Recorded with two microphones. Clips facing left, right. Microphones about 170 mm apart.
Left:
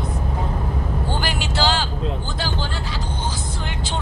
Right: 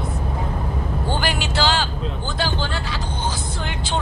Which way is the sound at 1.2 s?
70° right (ahead or behind).